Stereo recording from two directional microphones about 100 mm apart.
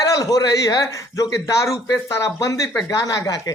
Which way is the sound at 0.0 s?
35° left (ahead or behind).